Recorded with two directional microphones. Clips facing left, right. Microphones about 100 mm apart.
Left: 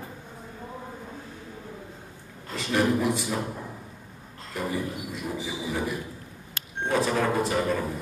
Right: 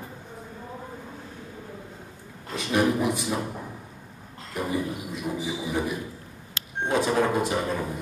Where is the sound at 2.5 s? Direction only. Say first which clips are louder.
Right 1 dB; 20° right (ahead or behind).